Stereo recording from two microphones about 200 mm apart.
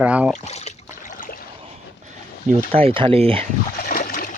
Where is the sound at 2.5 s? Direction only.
30° right (ahead or behind).